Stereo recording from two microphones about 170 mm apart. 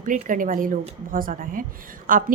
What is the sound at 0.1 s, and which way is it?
A woman's voice, 50° right (ahead or behind).